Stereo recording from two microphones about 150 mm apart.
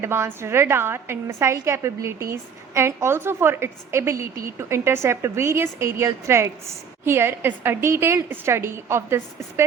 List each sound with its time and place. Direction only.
0.0 s a woman's voice: 15° right (ahead or behind)